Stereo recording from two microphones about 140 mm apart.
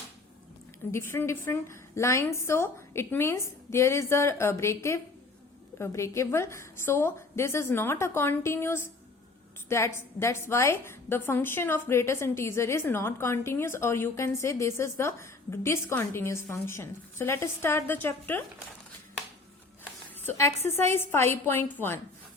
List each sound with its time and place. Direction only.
0.9 s a woman's voice: 20° left (ahead or behind)
19.8 s a sound: 20° left (ahead or behind)
20.7 s a woman's voice: 15° left (ahead or behind)